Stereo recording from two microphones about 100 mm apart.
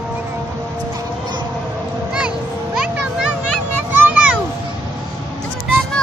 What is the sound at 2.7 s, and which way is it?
Music, 10° right (ahead or behind).